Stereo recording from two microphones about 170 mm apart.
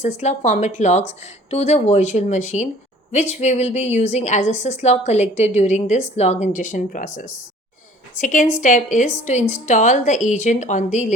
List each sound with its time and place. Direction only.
0.0 s a woman's voice: 40° left (ahead or behind)